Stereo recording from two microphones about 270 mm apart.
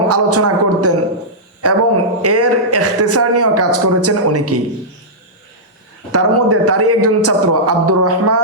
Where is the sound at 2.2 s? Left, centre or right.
Right.